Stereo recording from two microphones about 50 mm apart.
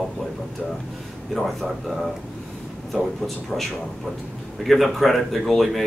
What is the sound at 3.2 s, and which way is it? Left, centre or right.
Speech, centre.